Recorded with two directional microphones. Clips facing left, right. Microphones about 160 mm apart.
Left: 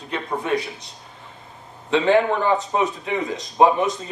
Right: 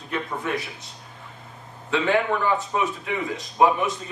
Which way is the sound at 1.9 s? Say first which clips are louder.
Left 4 dB; 30° left (ahead or behind).